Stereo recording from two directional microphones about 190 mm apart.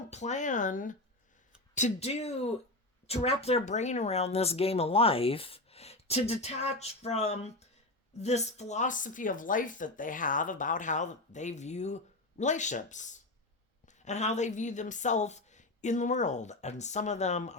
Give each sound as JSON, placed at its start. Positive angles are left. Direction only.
{"t": 0.1, "sound": "speech", "side_deg": 35}